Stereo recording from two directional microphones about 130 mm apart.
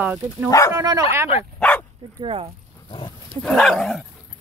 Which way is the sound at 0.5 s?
25° left (ahead or behind).